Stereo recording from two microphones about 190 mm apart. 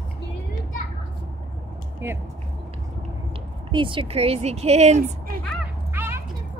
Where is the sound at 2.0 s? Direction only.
10° right (ahead or behind).